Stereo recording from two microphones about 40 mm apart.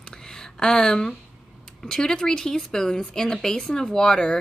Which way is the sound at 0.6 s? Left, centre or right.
Centre.